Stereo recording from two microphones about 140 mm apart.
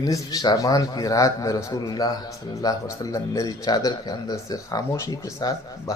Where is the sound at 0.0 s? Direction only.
25° left (ahead or behind).